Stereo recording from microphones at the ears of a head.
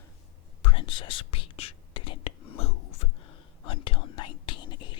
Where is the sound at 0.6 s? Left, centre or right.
Left.